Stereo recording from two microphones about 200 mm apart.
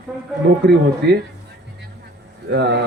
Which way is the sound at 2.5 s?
55° right (ahead or behind).